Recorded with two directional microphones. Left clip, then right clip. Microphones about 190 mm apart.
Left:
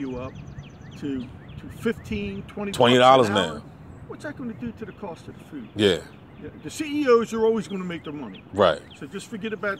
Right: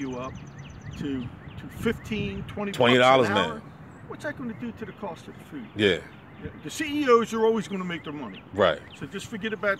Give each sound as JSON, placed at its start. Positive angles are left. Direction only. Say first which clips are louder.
{"t": 0.0, "sound": "a sound", "louder": "left 1 dB", "side_deg": -25}
{"t": 1.0, "sound": "speech", "louder": "left 2 dB", "side_deg": -10}
{"t": 2.8, "sound": "speech", "louder": "left 3 dB", "side_deg": 15}
{"t": 4.1, "sound": "speech", "louder": "right 1 dB", "side_deg": -15}
{"t": 5.8, "sound": "speech", "louder": "left 2 dB", "side_deg": 15}
{"t": 6.6, "sound": "speech", "louder": "left 2 dB", "side_deg": -10}
{"t": 8.5, "sound": "speech", "louder": "left 3 dB", "side_deg": 15}
{"t": 9.0, "sound": "speech", "louder": "even", "side_deg": -10}